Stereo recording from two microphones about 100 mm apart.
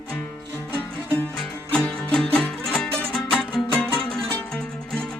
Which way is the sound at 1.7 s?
5° left (ahead or behind).